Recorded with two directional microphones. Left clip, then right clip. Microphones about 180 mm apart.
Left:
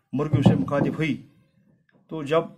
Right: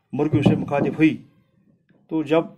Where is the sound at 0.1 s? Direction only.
10° right (ahead or behind).